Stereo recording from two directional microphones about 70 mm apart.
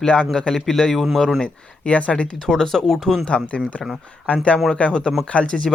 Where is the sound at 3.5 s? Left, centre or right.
Centre.